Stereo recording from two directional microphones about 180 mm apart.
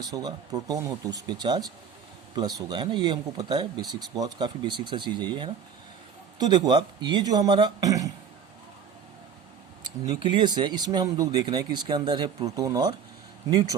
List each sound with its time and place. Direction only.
0.1 s speech: 20° right (ahead or behind)
9.8 s speech: 25° right (ahead or behind)